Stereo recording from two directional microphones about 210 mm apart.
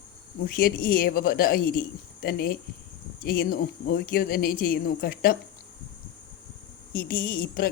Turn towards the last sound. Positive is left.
turn(degrees=45)  # may be behind; listen again after turning